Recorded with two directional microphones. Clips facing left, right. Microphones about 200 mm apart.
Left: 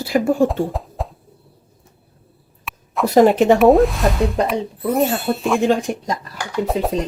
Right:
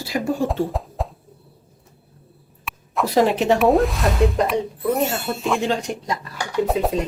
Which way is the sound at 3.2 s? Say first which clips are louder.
Left 6 dB; 50° left (ahead or behind).